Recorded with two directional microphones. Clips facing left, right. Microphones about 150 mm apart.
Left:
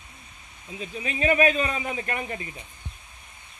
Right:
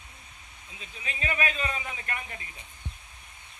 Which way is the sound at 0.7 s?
50° left (ahead or behind).